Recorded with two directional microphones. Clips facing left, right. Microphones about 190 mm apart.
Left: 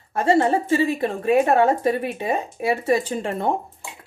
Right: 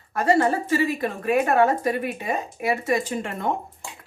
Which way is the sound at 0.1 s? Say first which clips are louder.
Left 2 dB; 25° left (ahead or behind).